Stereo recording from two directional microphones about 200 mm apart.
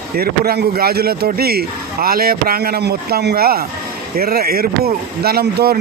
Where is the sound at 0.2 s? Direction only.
50° right (ahead or behind).